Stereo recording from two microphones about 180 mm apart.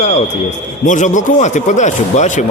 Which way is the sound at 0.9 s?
45° left (ahead or behind).